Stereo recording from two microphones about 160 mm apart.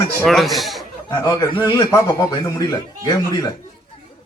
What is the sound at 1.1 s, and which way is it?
A man's voice, 25° left (ahead or behind).